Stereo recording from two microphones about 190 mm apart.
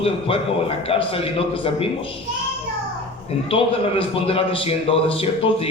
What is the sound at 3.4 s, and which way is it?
A man's voice, 30° left (ahead or behind).